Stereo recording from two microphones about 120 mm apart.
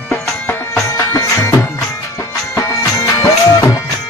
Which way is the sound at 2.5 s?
25° left (ahead or behind).